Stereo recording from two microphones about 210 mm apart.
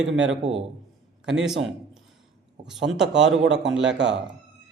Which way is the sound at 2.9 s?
90° right.